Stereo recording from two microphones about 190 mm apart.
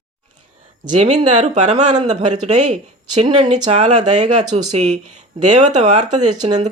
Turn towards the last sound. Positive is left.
turn(degrees=-40)  # may be behind; listen again after turning